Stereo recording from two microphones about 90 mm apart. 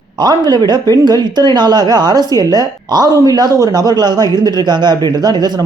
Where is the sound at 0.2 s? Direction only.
50° right (ahead or behind).